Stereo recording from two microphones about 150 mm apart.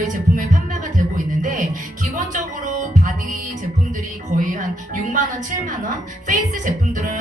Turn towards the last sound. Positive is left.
turn(degrees=-60)  # may be behind; listen again after turning